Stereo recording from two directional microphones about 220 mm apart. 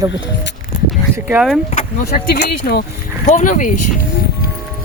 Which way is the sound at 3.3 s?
35° left (ahead or behind).